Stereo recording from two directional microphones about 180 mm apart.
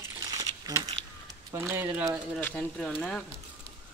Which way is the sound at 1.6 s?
10° right (ahead or behind).